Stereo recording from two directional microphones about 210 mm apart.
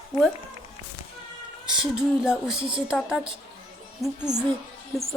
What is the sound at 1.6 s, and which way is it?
Speech, 5° right (ahead or behind).